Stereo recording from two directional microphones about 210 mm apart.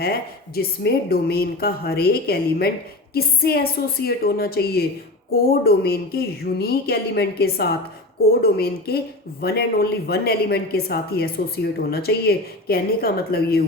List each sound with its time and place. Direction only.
0.0 s a woman's voice: 45° left (ahead or behind)